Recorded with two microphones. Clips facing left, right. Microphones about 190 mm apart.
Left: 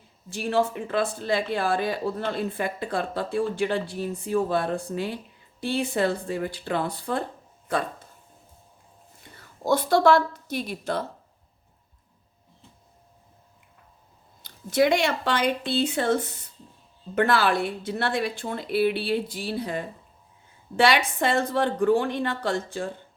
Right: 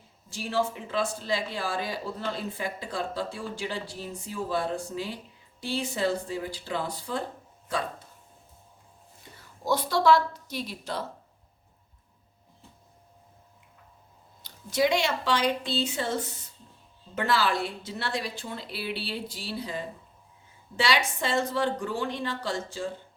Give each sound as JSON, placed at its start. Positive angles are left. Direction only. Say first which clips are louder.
{"t": 0.3, "sound": "speech", "louder": "left 4 dB", "side_deg": 55}
{"t": 9.6, "sound": "a woman's voice", "louder": "left 3 dB", "side_deg": 55}
{"t": 14.4, "sound": "speech", "louder": "left 4 dB", "side_deg": 55}